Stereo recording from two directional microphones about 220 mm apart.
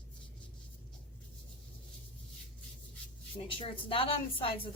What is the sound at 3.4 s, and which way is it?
A woman's voice, 25° left (ahead or behind).